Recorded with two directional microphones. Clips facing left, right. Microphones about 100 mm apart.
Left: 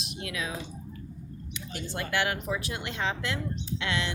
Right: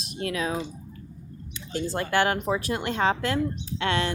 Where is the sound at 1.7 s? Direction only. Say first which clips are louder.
Right 6 dB; 35° right (ahead or behind).